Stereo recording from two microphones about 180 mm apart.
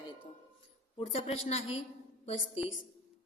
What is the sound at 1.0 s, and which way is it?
Speech, 35° left (ahead or behind).